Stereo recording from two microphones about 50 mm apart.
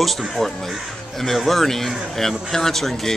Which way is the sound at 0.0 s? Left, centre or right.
Centre.